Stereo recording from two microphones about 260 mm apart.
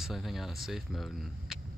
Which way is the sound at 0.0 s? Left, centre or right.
Centre.